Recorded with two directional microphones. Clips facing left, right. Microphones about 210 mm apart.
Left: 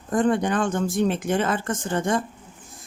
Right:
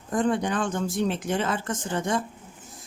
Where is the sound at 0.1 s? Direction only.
50° left (ahead or behind).